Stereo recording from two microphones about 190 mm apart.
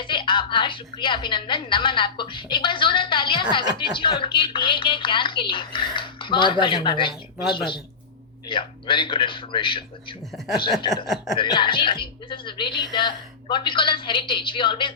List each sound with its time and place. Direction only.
0.0 s speech: 25° left (ahead or behind)
10.3 s speech: centre (ahead or behind)
11.3 s speech: 25° left (ahead or behind)